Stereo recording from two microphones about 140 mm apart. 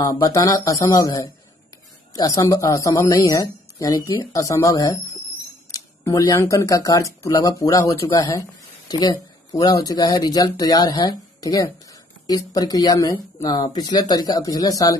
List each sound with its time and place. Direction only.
0.0 s speech: 25° left (ahead or behind)